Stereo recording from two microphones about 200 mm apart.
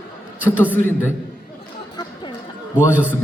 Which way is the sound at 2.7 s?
10° left (ahead or behind).